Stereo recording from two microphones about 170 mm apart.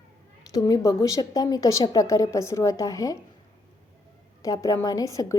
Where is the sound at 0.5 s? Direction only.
20° left (ahead or behind).